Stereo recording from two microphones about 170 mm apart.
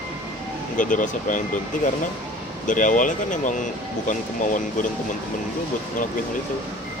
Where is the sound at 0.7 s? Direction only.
50° left (ahead or behind).